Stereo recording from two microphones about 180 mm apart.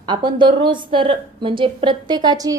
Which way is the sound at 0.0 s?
25° right (ahead or behind).